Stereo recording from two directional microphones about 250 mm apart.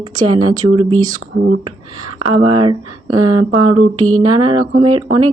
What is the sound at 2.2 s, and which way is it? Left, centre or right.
Speech, centre.